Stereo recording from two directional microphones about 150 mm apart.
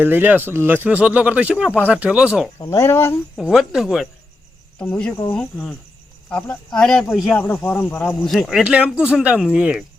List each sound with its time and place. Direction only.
0.0 s speech: 15° right (ahead or behind)
2.6 s speech: 20° left (ahead or behind)
3.3 s speech: centre (ahead or behind)
6.7 s speech: 5° left (ahead or behind)
8.2 s speech: centre (ahead or behind)